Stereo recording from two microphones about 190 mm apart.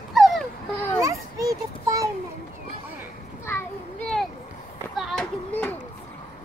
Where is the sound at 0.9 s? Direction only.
15° right (ahead or behind).